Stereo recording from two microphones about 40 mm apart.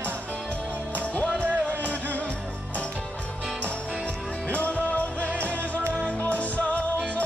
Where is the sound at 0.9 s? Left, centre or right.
Left.